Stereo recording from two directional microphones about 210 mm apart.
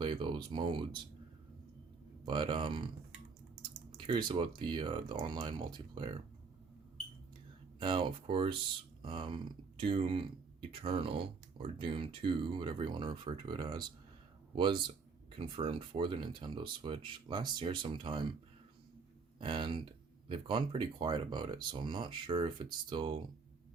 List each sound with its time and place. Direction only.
0.0 s speech: 20° right (ahead or behind)
2.2 s speech: 20° right (ahead or behind)
3.9 s speech: 20° right (ahead or behind)
7.8 s speech: 20° right (ahead or behind)
19.4 s speech: 25° right (ahead or behind)